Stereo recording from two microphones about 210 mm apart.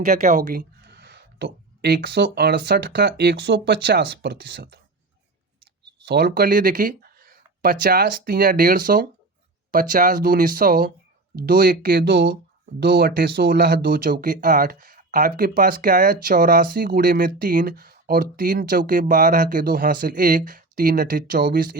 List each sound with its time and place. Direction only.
0.0 s speech: 35° right (ahead or behind); by 4.8 s 50° right (ahead or behind)
6.1 s speech: 50° right (ahead or behind)